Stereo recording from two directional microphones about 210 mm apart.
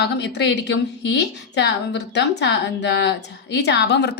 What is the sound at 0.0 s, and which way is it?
A woman's voice, 55° left (ahead or behind).